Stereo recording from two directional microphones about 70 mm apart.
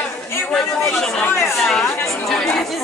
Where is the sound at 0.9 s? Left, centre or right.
Centre.